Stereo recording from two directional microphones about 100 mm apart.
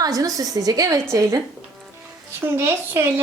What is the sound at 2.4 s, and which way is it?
Speech, 25° right (ahead or behind).